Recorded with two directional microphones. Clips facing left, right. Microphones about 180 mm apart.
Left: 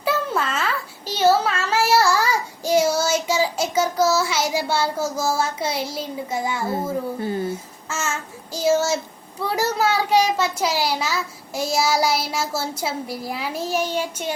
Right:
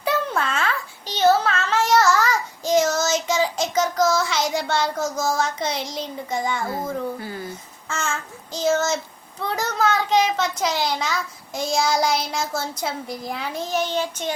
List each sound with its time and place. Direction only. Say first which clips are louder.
0.0 s a sound: even; centre (ahead or behind)
7.2 s speech: left 7 dB; 25° left (ahead or behind)
7.5 s a child's voice: left 2 dB; 5° left (ahead or behind)